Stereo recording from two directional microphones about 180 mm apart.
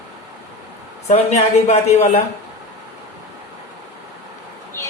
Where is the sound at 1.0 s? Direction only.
35° left (ahead or behind).